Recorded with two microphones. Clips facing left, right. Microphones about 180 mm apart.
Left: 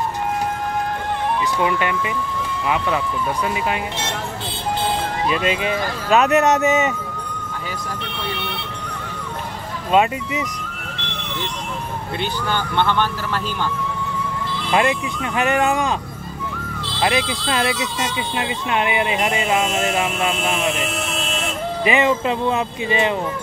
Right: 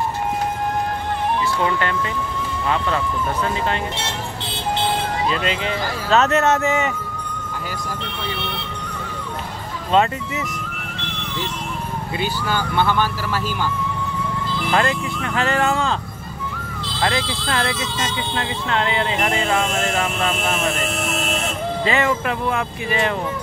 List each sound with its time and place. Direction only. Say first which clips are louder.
1.6 s speech: left 1 dB; 15° left (ahead or behind)
3.4 s speech: even; 10° left (ahead or behind)
5.3 s speech: left 2 dB; 15° left (ahead or behind)
9.8 s speech: left 1 dB; 15° left (ahead or behind)
12.2 s speech: right 1 dB; 5° right (ahead or behind)
14.7 s speech: left 2 dB; 15° left (ahead or behind)
17.0 s speech: left 2 dB; 15° left (ahead or behind)
21.8 s speech: left 3 dB; 20° left (ahead or behind)